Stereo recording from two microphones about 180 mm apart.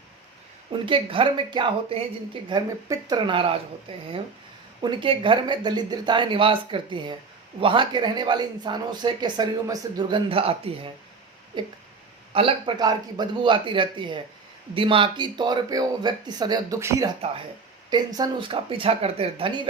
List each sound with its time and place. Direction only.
0.7 s speech: 30° right (ahead or behind)